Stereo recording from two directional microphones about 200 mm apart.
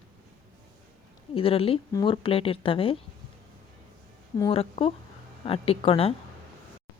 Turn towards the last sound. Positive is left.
turn(degrees=30)  # may be behind; listen again after turning